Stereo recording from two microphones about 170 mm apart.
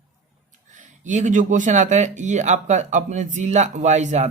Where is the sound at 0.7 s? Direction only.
45° right (ahead or behind).